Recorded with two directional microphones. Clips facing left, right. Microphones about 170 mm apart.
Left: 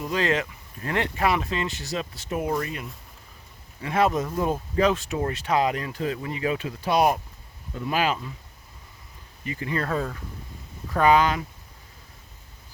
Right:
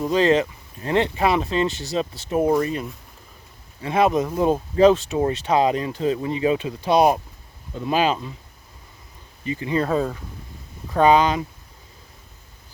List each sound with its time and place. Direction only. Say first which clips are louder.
0.0 s speech: right 7 dB; 30° right (ahead or behind)
3.8 s speech: right 4 dB; 15° right (ahead or behind)
4.5 s speech: right 9 dB; 30° right (ahead or behind)
9.4 s speech: right 6 dB; 20° right (ahead or behind)